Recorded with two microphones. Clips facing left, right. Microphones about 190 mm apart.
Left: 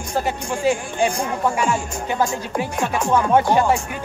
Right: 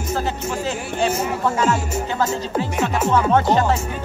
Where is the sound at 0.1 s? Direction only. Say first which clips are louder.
Left 1 dB; 10° left (ahead or behind).